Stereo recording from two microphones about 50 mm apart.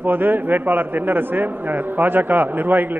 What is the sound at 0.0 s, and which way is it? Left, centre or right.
A man's voice, right.